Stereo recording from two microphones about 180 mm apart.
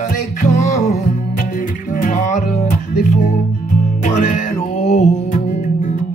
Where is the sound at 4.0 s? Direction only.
45° left (ahead or behind).